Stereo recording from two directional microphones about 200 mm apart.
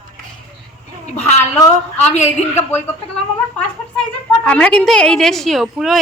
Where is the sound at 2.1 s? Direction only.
35° left (ahead or behind).